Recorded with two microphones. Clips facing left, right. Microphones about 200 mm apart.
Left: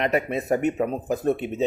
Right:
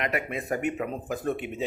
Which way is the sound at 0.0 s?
25° left (ahead or behind).